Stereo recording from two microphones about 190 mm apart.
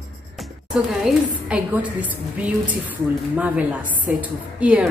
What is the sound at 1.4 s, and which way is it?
A woman's voice, 5° right (ahead or behind).